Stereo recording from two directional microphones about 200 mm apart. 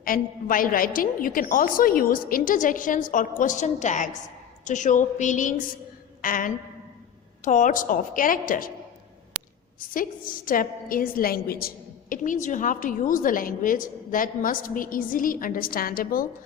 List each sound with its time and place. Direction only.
0.0 s a woman's voice: 45° left (ahead or behind)
9.9 s a woman's voice: 45° left (ahead or behind)